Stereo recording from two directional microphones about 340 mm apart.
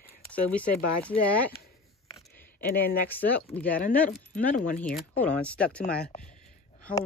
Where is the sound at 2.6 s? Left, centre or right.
Left.